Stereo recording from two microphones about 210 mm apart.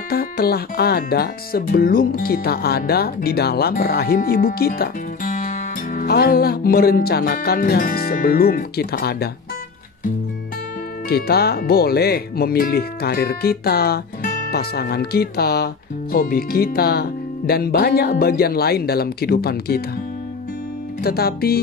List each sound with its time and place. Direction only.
0.1 s speech: 45° left (ahead or behind)
11.1 s speech: 50° left (ahead or behind)
21.0 s speech: 50° left (ahead or behind)